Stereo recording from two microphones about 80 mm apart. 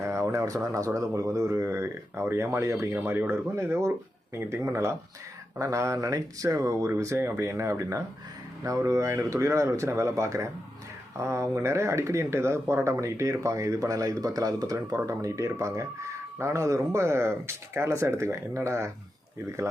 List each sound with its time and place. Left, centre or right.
0.0 s speech: right